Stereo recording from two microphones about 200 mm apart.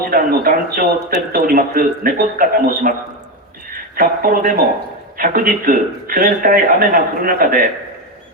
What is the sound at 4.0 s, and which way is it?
Speech, 45° right (ahead or behind).